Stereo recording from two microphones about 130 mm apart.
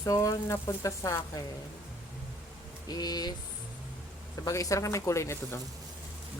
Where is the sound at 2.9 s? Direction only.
30° left (ahead or behind).